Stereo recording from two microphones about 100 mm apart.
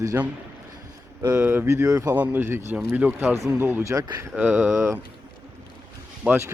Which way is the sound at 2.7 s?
15° right (ahead or behind).